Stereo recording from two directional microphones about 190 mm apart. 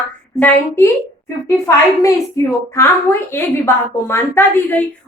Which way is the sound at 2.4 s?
15° left (ahead or behind).